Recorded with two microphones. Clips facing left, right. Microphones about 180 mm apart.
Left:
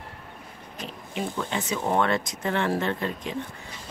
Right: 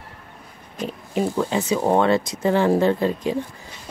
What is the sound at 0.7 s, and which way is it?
Speech, 45° right (ahead or behind).